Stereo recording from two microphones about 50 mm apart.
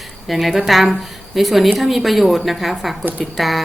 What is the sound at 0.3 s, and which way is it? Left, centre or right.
A woman's voice, centre.